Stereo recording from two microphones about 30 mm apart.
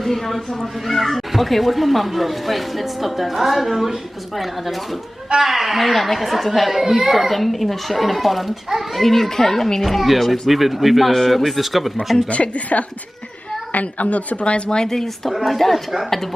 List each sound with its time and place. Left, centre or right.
0.0 s speech: centre
9.8 s speech: centre
12.3 s a woman's voice: left
14.4 s speech: left
14.8 s speech: centre
15.3 s speech: centre
16.0 s speech: centre